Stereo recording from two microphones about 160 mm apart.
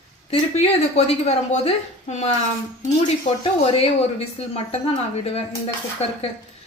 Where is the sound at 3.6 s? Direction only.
40° left (ahead or behind).